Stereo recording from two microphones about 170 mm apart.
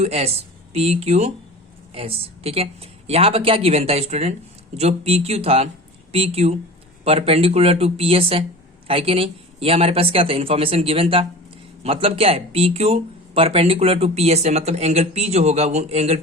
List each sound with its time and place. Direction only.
0.0 s speech: 35° right (ahead or behind)